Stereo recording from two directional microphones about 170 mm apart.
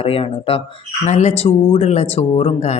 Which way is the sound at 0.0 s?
35° left (ahead or behind).